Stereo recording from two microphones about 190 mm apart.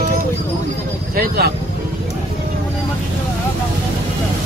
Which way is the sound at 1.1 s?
55° right (ahead or behind).